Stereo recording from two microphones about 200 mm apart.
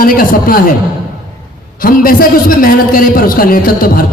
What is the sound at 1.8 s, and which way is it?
A man's voice, 45° left (ahead or behind).